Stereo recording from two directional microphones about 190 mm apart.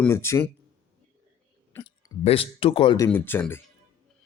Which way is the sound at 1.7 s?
20° left (ahead or behind).